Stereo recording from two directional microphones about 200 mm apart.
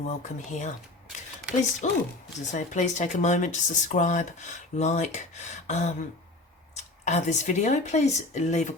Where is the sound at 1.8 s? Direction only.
40° left (ahead or behind).